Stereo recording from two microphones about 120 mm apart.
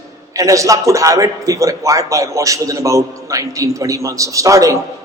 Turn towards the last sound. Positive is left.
turn(degrees=-25)  # may be behind; listen again after turning